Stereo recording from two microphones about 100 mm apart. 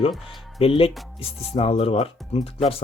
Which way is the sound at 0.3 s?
65° left (ahead or behind).